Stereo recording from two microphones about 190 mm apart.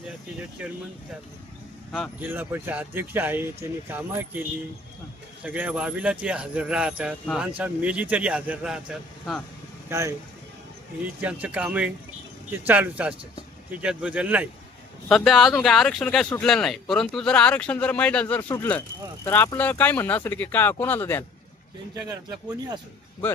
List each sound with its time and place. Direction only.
2.2 s speech: 10° right (ahead or behind)
5.4 s speech: 10° right (ahead or behind)
9.9 s speech: 15° right (ahead or behind); by 21.2 s 10° left (ahead or behind)
22.1 s speech: 20° right (ahead or behind)